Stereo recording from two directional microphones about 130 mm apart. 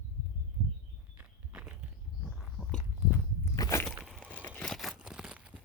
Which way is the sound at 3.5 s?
25° left (ahead or behind).